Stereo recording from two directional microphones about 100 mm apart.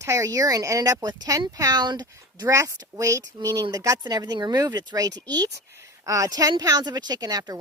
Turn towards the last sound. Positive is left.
turn(degrees=-40)  # may be behind; listen again after turning